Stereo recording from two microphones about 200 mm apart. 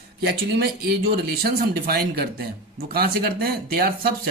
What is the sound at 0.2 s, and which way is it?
Speech, 50° right (ahead or behind).